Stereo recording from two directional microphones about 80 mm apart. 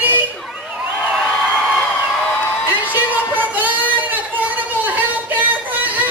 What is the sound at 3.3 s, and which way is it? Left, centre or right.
Child singing, right.